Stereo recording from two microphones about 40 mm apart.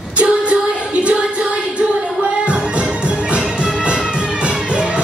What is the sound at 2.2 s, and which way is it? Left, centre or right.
Music, right.